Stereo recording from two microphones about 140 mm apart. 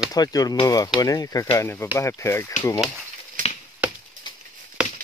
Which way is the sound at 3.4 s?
70° right (ahead or behind).